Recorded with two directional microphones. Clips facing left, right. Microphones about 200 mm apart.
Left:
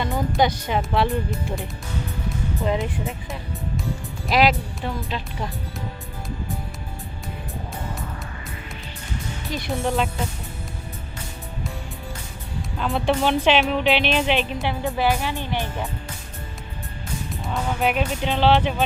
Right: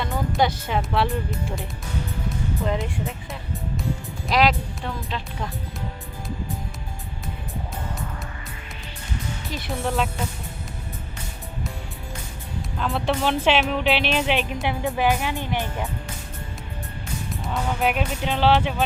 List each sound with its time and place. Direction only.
0.0 s speech: centre (ahead or behind)
4.3 s speech: 5° left (ahead or behind)
9.6 s speech: centre (ahead or behind)
12.8 s speech: centre (ahead or behind); by 15.9 s 15° right (ahead or behind)
17.4 s speech: centre (ahead or behind)